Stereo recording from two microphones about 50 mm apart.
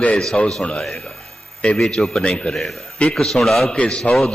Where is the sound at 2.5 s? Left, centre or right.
Centre.